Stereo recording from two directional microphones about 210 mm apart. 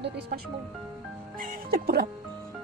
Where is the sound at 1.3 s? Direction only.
40° right (ahead or behind).